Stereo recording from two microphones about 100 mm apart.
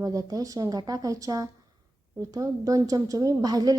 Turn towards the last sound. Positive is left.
turn(degrees=-40)  # may be behind; listen again after turning